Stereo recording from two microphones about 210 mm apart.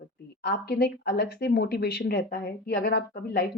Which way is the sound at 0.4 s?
50° left (ahead or behind).